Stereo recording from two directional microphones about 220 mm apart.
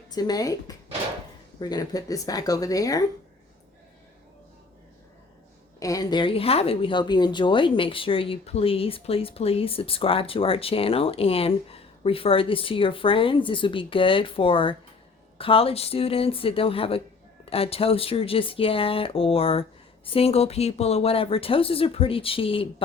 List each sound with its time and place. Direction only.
0.1 s speech: 15° left (ahead or behind)
5.8 s speech: 15° left (ahead or behind)